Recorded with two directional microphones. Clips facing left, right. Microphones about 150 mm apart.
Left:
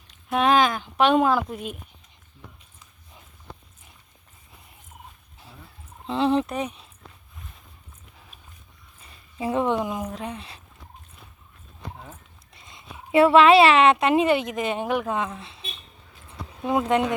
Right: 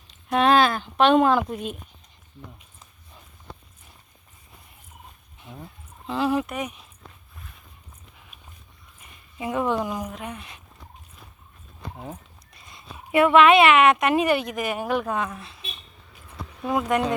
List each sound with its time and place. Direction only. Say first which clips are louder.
0.3 s speech: right 1 dB; 5° left (ahead or behind)
2.4 s speech: right 4 dB; 35° right (ahead or behind)
6.1 s speech: left 2 dB; 25° left (ahead or behind)
9.0 s a sound: left 3 dB; 30° left (ahead or behind)
10.1 s speech: left 2 dB; 30° left (ahead or behind)
11.9 s speech: right 6 dB; 35° right (ahead or behind)
12.5 s speech: even; 25° left (ahead or behind)